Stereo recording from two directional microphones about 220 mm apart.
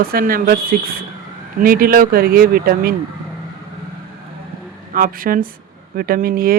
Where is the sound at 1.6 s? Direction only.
40° right (ahead or behind).